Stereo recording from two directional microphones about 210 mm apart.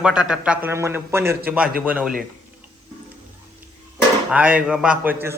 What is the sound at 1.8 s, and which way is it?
Speech, 5° right (ahead or behind).